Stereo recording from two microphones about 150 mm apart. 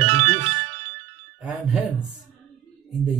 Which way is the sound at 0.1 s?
40° right (ahead or behind).